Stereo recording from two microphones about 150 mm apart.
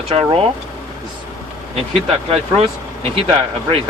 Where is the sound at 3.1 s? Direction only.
40° right (ahead or behind).